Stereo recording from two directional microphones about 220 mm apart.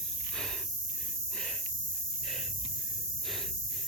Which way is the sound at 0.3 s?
Centre (ahead or behind).